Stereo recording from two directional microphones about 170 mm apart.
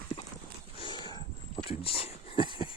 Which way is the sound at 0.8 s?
25° left (ahead or behind).